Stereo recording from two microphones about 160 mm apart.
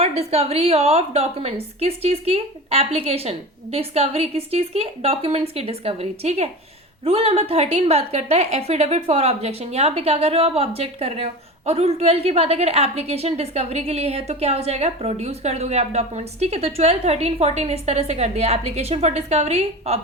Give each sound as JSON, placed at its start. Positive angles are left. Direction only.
{"t": 0.0, "sound": "a woman's voice", "side_deg": -40}